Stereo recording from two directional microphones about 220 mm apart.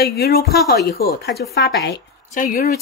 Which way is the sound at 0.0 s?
45° left (ahead or behind).